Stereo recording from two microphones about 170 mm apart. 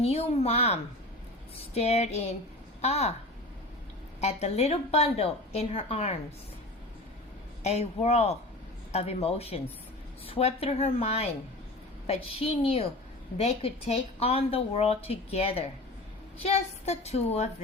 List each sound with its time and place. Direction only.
0.0 s speech: 35° left (ahead or behind)
4.2 s speech: 40° left (ahead or behind)
7.6 s speech: 40° left (ahead or behind)